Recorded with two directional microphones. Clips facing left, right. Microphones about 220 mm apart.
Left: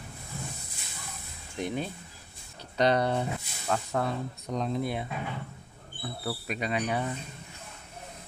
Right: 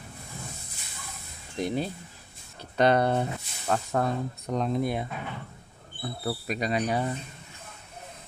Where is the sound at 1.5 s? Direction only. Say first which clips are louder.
Right 3 dB; 35° right (ahead or behind).